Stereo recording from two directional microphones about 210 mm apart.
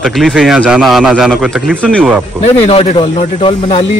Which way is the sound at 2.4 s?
30° left (ahead or behind).